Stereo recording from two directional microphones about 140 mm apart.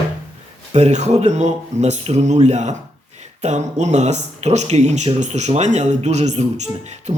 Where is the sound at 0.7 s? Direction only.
55° right (ahead or behind).